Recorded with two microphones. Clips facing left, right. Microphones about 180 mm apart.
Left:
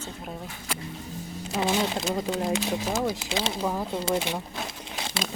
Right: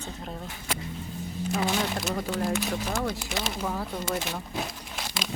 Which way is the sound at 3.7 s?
15° left (ahead or behind).